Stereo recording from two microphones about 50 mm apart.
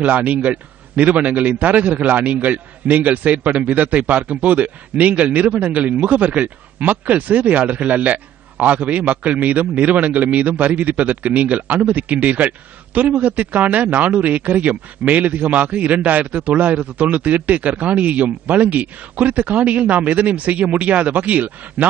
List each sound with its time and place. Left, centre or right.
0.0 s a man's voice: right